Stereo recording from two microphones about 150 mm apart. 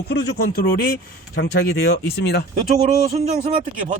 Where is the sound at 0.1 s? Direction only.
90° left.